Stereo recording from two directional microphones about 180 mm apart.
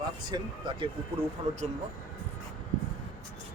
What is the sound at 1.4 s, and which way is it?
Speech, 35° right (ahead or behind).